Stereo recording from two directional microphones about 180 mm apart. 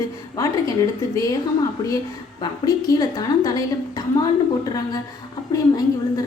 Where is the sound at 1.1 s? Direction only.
20° left (ahead or behind).